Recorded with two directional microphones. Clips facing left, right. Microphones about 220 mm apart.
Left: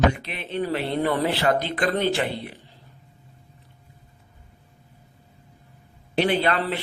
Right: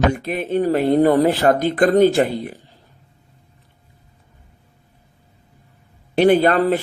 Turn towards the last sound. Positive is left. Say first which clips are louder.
# right 8 dB
turn(degrees=-45)  # may be behind; listen again after turning